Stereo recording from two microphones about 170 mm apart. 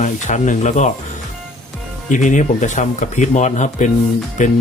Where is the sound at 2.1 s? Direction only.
50° left (ahead or behind).